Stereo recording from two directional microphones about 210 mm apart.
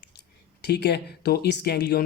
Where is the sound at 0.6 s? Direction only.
50° left (ahead or behind).